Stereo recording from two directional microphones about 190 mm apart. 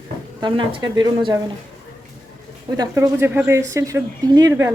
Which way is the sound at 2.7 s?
15° right (ahead or behind).